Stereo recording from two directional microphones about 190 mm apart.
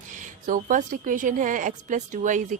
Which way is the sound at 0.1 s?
40° right (ahead or behind).